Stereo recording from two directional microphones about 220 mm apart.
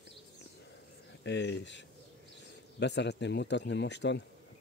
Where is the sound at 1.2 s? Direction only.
50° left (ahead or behind).